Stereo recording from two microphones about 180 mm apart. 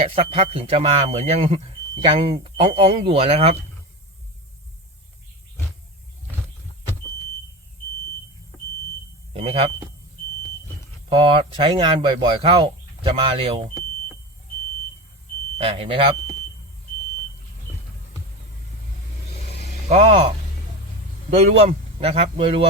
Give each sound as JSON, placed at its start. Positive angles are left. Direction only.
{"t": 0.0, "sound": "speech", "side_deg": -30}
{"t": 9.3, "sound": "speech", "side_deg": -35}
{"t": 11.1, "sound": "speech", "side_deg": -30}
{"t": 15.5, "sound": "speech", "side_deg": -30}
{"t": 19.9, "sound": "speech", "side_deg": -35}
{"t": 21.2, "sound": "speech", "side_deg": -35}